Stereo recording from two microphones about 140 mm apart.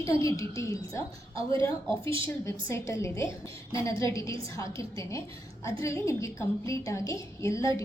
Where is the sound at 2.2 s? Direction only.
20° left (ahead or behind).